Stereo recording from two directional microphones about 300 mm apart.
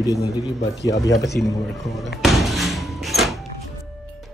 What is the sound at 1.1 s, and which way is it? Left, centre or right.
Speech, centre.